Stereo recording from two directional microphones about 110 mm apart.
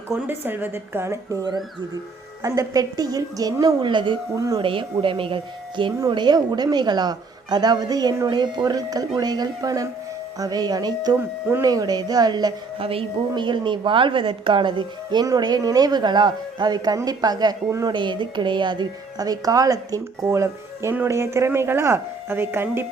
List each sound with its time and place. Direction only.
0.1 s a woman's voice: 20° right (ahead or behind); by 4.2 s 45° right (ahead or behind)
4.4 s a woman's voice: 30° right (ahead or behind)
4.6 s a woman's voice: 55° right (ahead or behind); by 12.5 s 35° right (ahead or behind)
12.8 s a woman's voice: 55° right (ahead or behind)
15.2 s a woman's voice: 35° right (ahead or behind)
17.9 s a woman's voice: 45° right (ahead or behind); by 22.9 s 20° right (ahead or behind)